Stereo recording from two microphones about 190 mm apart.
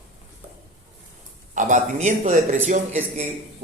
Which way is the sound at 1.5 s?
40° right (ahead or behind).